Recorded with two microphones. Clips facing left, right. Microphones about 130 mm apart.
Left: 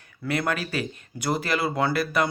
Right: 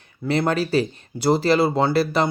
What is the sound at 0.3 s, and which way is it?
Speech, 30° right (ahead or behind).